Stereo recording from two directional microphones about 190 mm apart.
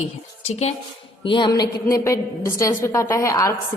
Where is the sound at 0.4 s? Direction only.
35° left (ahead or behind); by 3.5 s 15° left (ahead or behind).